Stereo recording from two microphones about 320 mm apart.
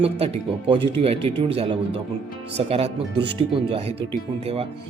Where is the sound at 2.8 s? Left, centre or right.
Right.